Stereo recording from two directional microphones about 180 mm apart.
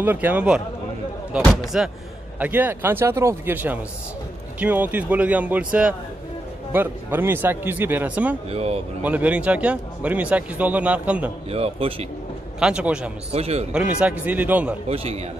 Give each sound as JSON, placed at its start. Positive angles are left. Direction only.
{"t": 0.0, "sound": "a man's voice", "side_deg": -10}
{"t": 8.5, "sound": "a man's voice", "side_deg": -35}
{"t": 9.0, "sound": "speech", "side_deg": -10}
{"t": 11.5, "sound": "a man's voice", "side_deg": -35}
{"t": 12.5, "sound": "a man's voice", "side_deg": -5}
{"t": 13.3, "sound": "a man's voice", "side_deg": -35}
{"t": 13.7, "sound": "speech", "side_deg": -5}
{"t": 14.9, "sound": "a man's voice", "side_deg": -35}